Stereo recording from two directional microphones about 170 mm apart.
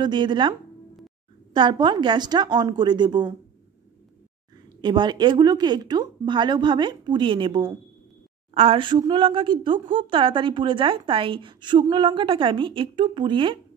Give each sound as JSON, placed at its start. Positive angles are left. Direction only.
{"t": 0.0, "sound": "speech", "side_deg": -25}
{"t": 4.8, "sound": "speech", "side_deg": -25}